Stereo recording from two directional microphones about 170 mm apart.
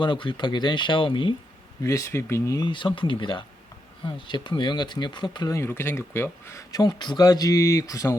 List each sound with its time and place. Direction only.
0.0 s speech: 30° left (ahead or behind)
1.8 s speech: 20° left (ahead or behind)